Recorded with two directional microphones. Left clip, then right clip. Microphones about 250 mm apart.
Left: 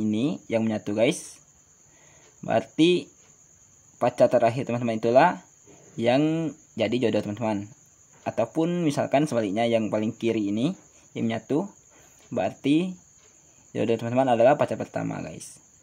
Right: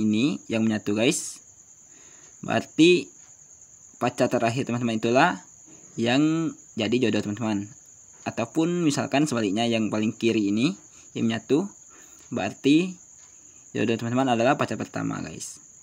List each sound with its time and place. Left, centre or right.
0.0 s speech: right
2.4 s speech: right